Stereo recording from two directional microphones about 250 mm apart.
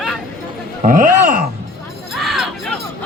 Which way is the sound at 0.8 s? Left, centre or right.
Right.